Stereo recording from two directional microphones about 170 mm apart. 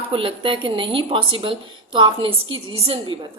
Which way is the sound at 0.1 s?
30° right (ahead or behind).